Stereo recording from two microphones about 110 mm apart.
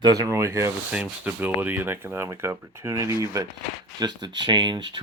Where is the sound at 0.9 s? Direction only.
10° right (ahead or behind); by 3.4 s 30° right (ahead or behind).